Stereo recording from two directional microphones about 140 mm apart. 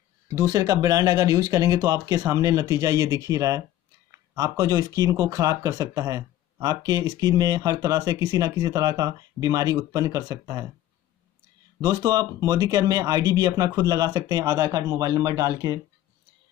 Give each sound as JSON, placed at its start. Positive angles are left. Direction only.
{"t": 0.3, "sound": "speech", "side_deg": -25}
{"t": 11.8, "sound": "speech", "side_deg": -25}